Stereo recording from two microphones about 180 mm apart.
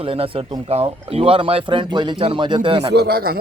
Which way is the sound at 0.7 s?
35° right (ahead or behind).